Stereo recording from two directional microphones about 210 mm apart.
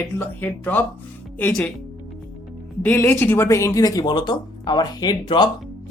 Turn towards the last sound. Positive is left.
turn(degrees=20)  # may be behind; listen again after turning